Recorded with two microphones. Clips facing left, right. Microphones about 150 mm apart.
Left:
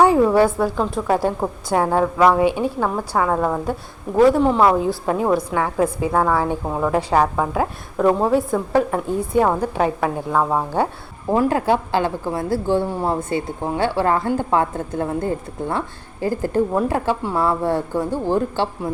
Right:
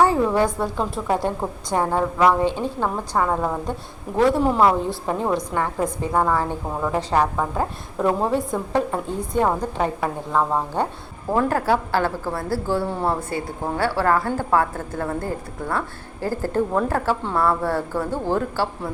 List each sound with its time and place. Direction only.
0.0 s a woman's voice: 10° left (ahead or behind)